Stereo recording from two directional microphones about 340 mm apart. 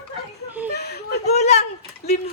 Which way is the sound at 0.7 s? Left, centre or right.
Left.